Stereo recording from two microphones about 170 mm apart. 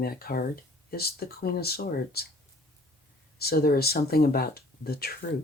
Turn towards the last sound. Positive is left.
turn(degrees=65)  # may be behind; listen again after turning